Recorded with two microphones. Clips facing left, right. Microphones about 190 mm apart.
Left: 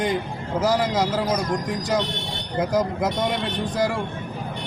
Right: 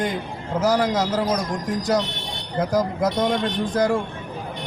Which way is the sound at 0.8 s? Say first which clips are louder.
Right 1 dB; 10° left (ahead or behind).